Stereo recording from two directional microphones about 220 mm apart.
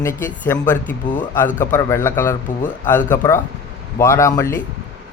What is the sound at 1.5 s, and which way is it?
Speech, 35° left (ahead or behind).